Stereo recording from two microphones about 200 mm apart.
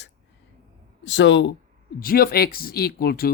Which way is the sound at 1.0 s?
65° left (ahead or behind).